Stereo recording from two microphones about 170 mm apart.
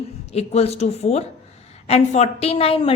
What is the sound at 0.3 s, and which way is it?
A woman's voice, 40° left (ahead or behind).